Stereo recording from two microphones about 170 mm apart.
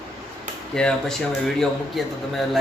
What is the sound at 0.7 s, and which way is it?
A man's voice, 5° left (ahead or behind).